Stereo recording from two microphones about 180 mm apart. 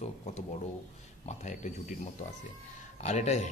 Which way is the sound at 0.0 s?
35° left (ahead or behind).